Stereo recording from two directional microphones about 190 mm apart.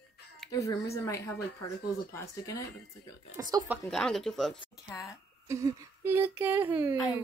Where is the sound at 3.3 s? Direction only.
20° right (ahead or behind).